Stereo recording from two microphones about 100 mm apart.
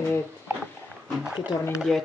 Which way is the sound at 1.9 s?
5° left (ahead or behind).